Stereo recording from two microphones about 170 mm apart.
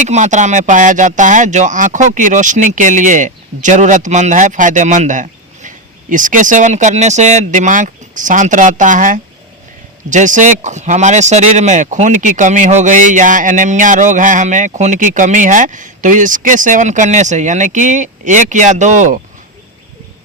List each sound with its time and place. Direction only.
0.0 s speech: 45° right (ahead or behind)